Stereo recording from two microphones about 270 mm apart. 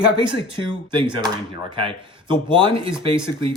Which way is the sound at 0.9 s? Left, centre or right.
Centre.